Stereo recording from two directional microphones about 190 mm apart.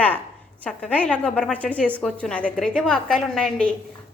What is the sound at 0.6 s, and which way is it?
A woman's voice, 5° left (ahead or behind).